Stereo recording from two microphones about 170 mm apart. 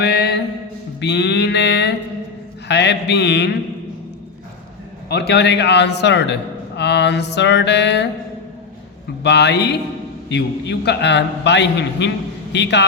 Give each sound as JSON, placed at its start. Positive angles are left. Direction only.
{"t": 0.0, "sound": "music", "side_deg": 75}
{"t": 1.0, "sound": "mantra", "side_deg": 90}
{"t": 5.0, "sound": "a man's voice", "side_deg": 75}
{"t": 9.2, "sound": "a man's voice", "side_deg": 90}